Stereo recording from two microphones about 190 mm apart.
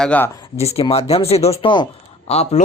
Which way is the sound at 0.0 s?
5° left (ahead or behind).